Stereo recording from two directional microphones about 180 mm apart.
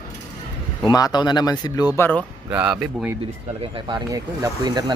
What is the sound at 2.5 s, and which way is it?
Speech, 5° right (ahead or behind).